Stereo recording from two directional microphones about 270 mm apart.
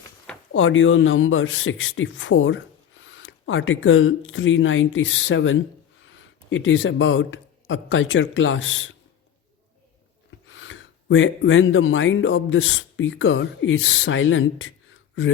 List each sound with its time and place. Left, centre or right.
0.5 s a man's voice: left
10.5 s speech: left